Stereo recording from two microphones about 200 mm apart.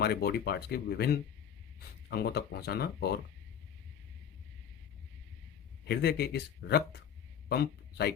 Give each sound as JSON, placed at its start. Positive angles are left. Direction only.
{"t": 0.0, "sound": "speech", "side_deg": 55}
{"t": 5.8, "sound": "a man's voice", "side_deg": 55}